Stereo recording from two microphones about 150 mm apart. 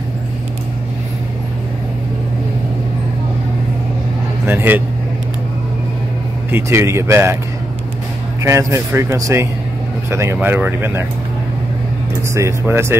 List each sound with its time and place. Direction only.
4.5 s speech: 15° right (ahead or behind)
6.5 s speech: 15° right (ahead or behind)
8.4 s speech: 20° right (ahead or behind)
12.4 s speech: 15° right (ahead or behind)